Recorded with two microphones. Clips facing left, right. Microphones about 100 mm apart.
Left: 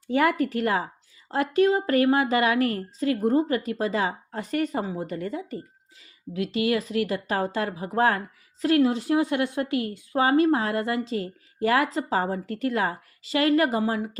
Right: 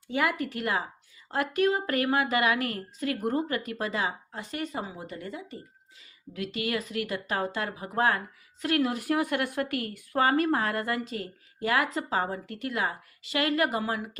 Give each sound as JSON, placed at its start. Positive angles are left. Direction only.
{"t": 0.1, "sound": "a woman's voice", "side_deg": 40}